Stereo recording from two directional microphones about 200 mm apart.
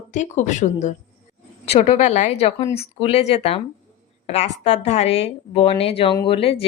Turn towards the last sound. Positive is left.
turn(degrees=30)  # may be behind; listen again after turning